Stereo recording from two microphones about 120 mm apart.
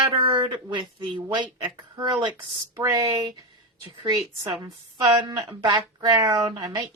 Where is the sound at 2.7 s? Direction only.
30° right (ahead or behind).